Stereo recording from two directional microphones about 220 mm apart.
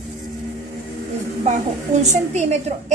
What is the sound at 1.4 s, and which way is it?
Speech, 30° right (ahead or behind).